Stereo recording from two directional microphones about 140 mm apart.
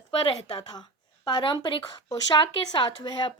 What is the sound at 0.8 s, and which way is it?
Speech, 35° left (ahead or behind).